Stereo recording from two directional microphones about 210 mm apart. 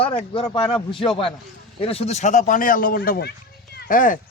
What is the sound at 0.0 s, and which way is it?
A man's voice, 25° left (ahead or behind).